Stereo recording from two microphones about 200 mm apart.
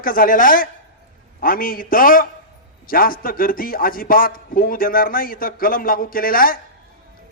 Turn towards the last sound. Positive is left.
turn(degrees=45)  # may be behind; listen again after turning